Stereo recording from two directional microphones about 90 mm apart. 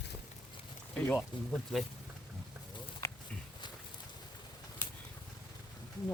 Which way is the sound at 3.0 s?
30° left (ahead or behind).